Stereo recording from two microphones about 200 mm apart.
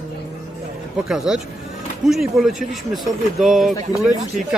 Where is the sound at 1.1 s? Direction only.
Centre (ahead or behind).